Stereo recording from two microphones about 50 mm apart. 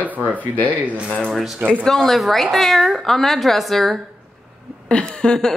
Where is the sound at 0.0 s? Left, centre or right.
Right.